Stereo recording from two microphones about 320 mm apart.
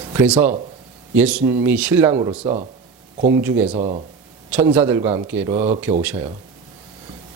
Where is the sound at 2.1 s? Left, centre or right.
Centre.